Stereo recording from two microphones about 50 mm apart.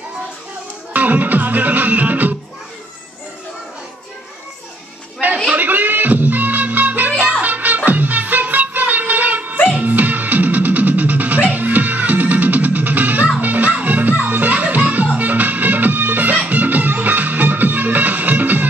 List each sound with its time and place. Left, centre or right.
0.9 s music: right
5.6 s music: right